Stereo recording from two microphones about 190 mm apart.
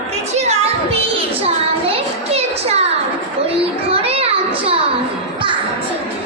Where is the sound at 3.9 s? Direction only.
30° right (ahead or behind).